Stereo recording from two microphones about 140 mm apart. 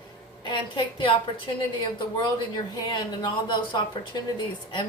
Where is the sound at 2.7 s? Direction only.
30° left (ahead or behind).